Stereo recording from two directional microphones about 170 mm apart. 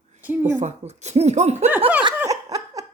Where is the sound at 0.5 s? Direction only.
40° right (ahead or behind).